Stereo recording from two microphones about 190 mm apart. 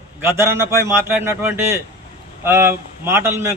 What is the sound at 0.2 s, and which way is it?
A man's voice, 15° right (ahead or behind).